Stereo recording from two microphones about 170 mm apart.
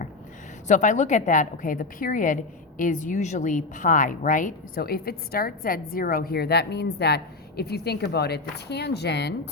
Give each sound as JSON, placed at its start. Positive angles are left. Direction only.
{"t": 0.7, "sound": "a woman's voice", "side_deg": 45}